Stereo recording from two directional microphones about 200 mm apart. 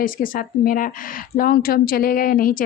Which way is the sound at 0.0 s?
45° left (ahead or behind).